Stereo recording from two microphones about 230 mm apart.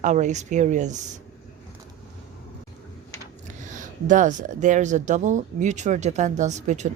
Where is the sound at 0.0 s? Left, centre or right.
Right.